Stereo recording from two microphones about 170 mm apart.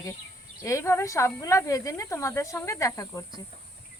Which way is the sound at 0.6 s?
15° left (ahead or behind).